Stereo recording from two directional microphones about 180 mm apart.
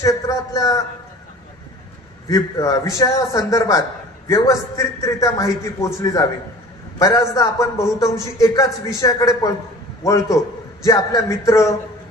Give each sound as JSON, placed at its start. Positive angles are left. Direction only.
{"t": 0.0, "sound": "a man's voice", "side_deg": 20}
{"t": 2.3, "sound": "a man's voice", "side_deg": 20}